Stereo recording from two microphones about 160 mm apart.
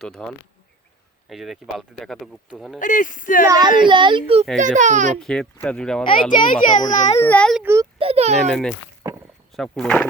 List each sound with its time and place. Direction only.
0.0 s speech: 5° left (ahead or behind)
1.3 s speech: centre (ahead or behind)
2.7 s speech: 55° left (ahead or behind)
3.5 s a child's voice: 25° right (ahead or behind)
4.5 s a child's voice: 50° right (ahead or behind)
5.2 s speech: 5° left (ahead or behind)
6.4 s a child's voice: 50° left (ahead or behind)
7.2 s a child's voice: 10° left (ahead or behind)
7.6 s a child's voice: 15° right (ahead or behind)
7.9 s a child's voice: 40° right (ahead or behind)
8.4 s speech: 5° left (ahead or behind)
9.0 s rowboat: 15° right (ahead or behind)
9.7 s speech: 5° left (ahead or behind)